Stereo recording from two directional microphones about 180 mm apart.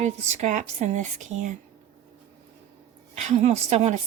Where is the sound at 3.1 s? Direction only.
40° right (ahead or behind).